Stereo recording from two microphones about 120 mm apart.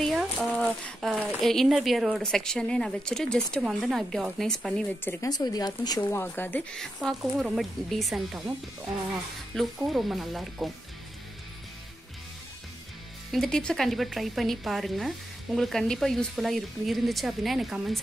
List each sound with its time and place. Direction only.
0.5 s a sound: 10° left (ahead or behind)
1.2 s a woman's voice: 5° left (ahead or behind)
5.0 s speech: 15° left (ahead or behind)
5.3 s speech: 35° left (ahead or behind)
6.0 s speech: 15° left (ahead or behind)
6.8 s a woman's voice: centre (ahead or behind)
9.5 s a woman's voice: 5° left (ahead or behind)
13.3 s a woman's voice: 5° left (ahead or behind)